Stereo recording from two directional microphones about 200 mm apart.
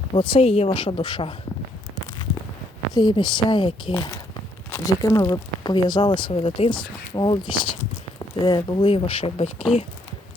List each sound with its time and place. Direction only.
0.1 s speech: 25° left (ahead or behind)
2.9 s speech: 20° left (ahead or behind)
3.9 s speech: 10° left (ahead or behind); by 9.6 s 30° left (ahead or behind)